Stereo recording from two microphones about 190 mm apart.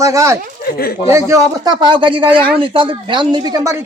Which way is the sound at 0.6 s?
55° left (ahead or behind).